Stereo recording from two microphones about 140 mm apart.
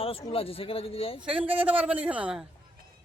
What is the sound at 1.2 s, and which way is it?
Speech, 40° right (ahead or behind).